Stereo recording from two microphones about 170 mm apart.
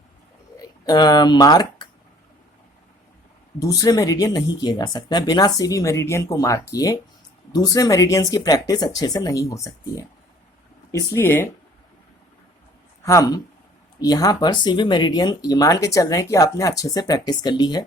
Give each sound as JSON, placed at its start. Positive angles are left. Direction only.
{"t": 0.5, "sound": "speech", "side_deg": 20}
{"t": 3.6, "sound": "speech", "side_deg": 20}
{"t": 13.0, "sound": "speech", "side_deg": 15}